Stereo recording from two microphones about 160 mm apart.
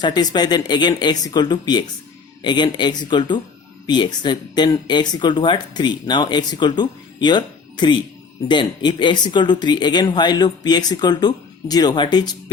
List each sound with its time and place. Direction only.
0.0 s speech: 25° left (ahead or behind)